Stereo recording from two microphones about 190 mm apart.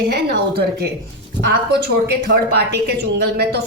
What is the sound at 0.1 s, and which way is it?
Speech, 55° right (ahead or behind).